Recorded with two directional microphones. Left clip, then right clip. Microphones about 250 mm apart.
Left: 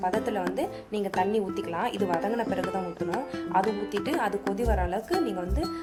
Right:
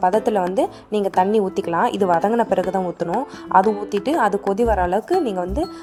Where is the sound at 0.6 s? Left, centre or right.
Right.